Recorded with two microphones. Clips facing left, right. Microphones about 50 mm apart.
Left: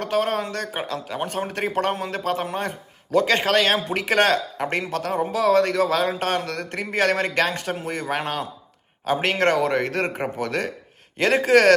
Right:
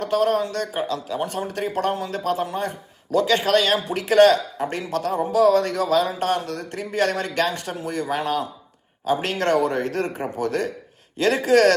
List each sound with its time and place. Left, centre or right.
0.0 s a man's voice: left